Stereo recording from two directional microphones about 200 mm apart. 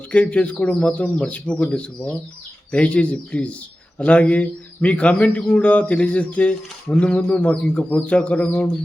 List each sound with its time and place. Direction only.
0.1 s speech: 5° left (ahead or behind)